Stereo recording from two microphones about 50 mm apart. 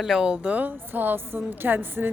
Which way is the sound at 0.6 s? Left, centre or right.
Right.